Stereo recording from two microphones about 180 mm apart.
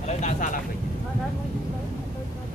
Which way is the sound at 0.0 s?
45° left (ahead or behind).